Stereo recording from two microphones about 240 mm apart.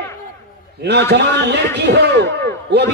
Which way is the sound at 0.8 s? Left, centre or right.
Right.